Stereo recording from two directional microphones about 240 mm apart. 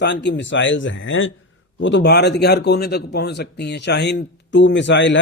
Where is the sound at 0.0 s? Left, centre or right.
Left.